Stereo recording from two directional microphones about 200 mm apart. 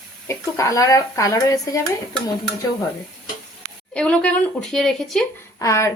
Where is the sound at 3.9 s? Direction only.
5° left (ahead or behind).